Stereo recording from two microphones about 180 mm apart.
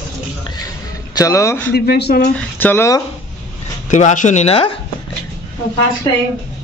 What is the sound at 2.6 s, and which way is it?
Speech, 10° left (ahead or behind).